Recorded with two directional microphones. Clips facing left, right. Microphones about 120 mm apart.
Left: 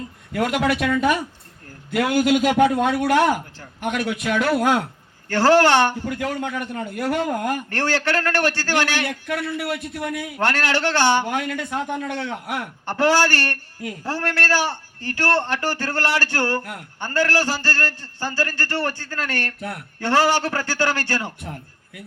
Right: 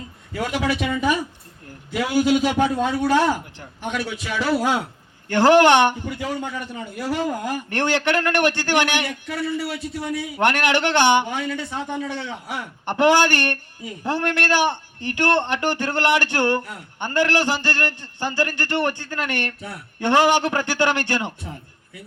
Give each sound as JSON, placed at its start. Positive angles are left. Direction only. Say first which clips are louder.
{"t": 0.3, "sound": "a man's voice", "louder": "left 3 dB", "side_deg": 65}
{"t": 5.3, "sound": "a man's voice", "louder": "right 2 dB", "side_deg": -20}
{"t": 6.1, "sound": "a man's voice", "louder": "left 2 dB", "side_deg": 65}
{"t": 7.7, "sound": "a man's voice", "louder": "right 5 dB", "side_deg": -20}
{"t": 9.0, "sound": "a man's voice", "louder": "even", "side_deg": 60}
{"t": 10.4, "sound": "a man's voice", "louder": "right 2 dB", "side_deg": -20}
{"t": 11.3, "sound": "a man's voice", "louder": "left 2 dB", "side_deg": 55}
{"t": 12.8, "sound": "a man's voice", "louder": "right 2 dB", "side_deg": -20}